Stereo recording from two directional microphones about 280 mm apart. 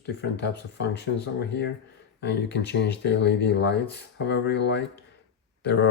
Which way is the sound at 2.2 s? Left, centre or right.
Left.